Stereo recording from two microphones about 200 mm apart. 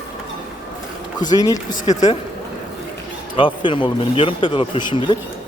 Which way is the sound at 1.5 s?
40° left (ahead or behind).